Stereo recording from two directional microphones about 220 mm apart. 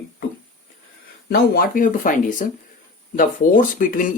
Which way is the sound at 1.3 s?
45° left (ahead or behind).